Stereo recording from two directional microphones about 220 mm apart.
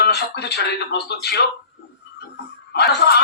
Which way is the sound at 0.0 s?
50° left (ahead or behind).